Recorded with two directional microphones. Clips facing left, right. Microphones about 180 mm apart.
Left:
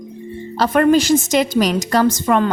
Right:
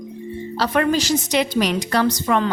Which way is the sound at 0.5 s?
45° left (ahead or behind).